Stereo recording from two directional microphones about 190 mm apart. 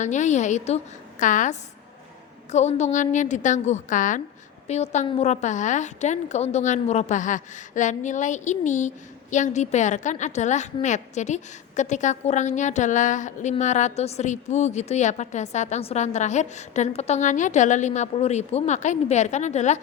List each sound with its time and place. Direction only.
0.0 s a woman's voice: 40° left (ahead or behind)